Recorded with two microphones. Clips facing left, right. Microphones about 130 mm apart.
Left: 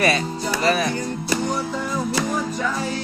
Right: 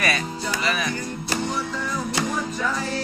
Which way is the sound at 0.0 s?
30° left (ahead or behind).